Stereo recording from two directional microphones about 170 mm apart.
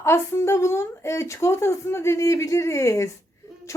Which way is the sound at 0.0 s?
15° left (ahead or behind).